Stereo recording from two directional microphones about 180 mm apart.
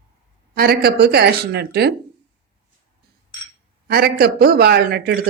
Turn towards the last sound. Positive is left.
turn(degrees=-65)  # may be behind; listen again after turning